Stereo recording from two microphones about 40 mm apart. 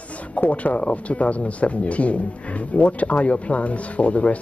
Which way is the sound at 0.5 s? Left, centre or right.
Left.